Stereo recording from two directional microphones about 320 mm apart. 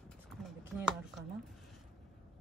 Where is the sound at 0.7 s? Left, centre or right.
Centre.